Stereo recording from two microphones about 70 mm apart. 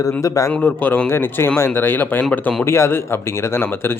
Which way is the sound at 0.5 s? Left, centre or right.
Left.